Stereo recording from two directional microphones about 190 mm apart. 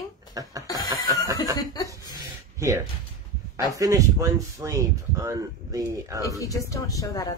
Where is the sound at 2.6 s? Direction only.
15° right (ahead or behind).